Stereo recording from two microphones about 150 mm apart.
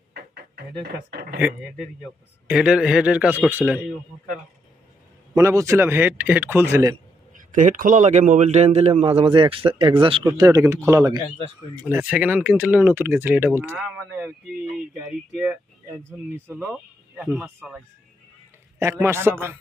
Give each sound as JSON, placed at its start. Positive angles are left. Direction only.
{"t": 1.1, "sound": "speech", "side_deg": -90}
{"t": 2.5, "sound": "speech", "side_deg": -5}
{"t": 5.3, "sound": "speech", "side_deg": -20}
{"t": 7.3, "sound": "a man's voice", "side_deg": -60}
{"t": 10.2, "sound": "speech", "side_deg": -20}
{"t": 11.9, "sound": "speech", "side_deg": -10}
{"t": 16.7, "sound": "a sound", "side_deg": -5}
{"t": 17.4, "sound": "speech", "side_deg": -15}
{"t": 18.8, "sound": "speech", "side_deg": -15}